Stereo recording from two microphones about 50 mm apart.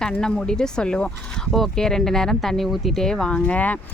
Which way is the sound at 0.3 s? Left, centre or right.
Centre.